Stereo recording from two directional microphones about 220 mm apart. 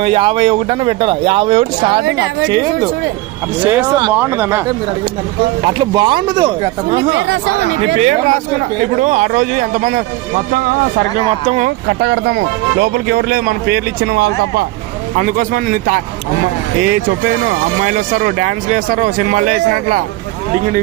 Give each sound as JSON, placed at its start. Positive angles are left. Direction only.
{"t": 0.0, "sound": "speech", "side_deg": -25}
{"t": 4.1, "sound": "speech", "side_deg": -10}
{"t": 5.6, "sound": "speech", "side_deg": -20}
{"t": 7.3, "sound": "a man's voice", "side_deg": -55}
{"t": 7.9, "sound": "speech", "side_deg": -35}
{"t": 11.4, "sound": "speech", "side_deg": -30}
{"t": 12.0, "sound": "a man's voice", "side_deg": -55}
{"t": 17.8, "sound": "speech", "side_deg": -40}